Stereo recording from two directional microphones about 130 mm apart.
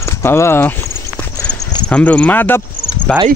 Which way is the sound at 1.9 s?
10° left (ahead or behind).